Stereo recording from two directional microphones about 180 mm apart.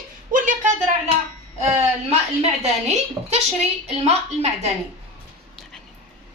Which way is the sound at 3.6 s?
35° right (ahead or behind).